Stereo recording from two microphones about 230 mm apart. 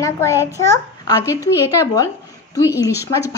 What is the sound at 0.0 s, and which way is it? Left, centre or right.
Speech, centre.